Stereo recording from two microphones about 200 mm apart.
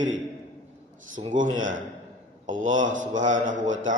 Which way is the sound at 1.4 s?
40° right (ahead or behind).